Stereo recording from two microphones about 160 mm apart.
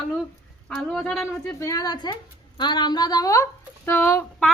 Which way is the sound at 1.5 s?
20° left (ahead or behind).